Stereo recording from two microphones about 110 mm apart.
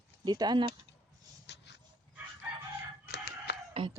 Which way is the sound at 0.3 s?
40° right (ahead or behind).